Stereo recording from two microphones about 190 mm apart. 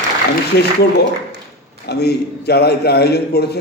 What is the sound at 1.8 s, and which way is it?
A man's voice, 60° left (ahead or behind).